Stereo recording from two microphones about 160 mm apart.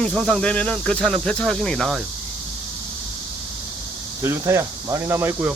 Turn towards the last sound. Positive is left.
turn(degrees=-15)  # may be behind; listen again after turning